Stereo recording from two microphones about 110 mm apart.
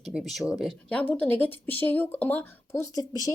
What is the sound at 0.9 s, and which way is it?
A woman's voice, 10° left (ahead or behind).